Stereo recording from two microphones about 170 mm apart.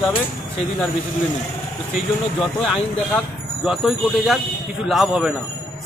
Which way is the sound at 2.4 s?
Centre (ahead or behind).